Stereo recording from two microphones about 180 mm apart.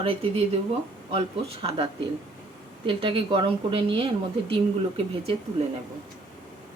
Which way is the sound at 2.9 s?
30° right (ahead or behind).